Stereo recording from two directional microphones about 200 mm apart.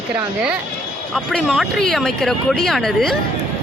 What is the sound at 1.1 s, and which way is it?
Speech, 5° left (ahead or behind).